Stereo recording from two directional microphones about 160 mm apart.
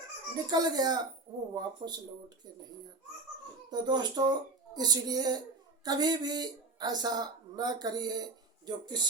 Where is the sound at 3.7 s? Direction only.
25° right (ahead or behind).